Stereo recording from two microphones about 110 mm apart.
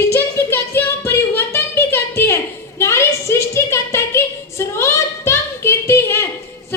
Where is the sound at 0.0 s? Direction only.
25° left (ahead or behind).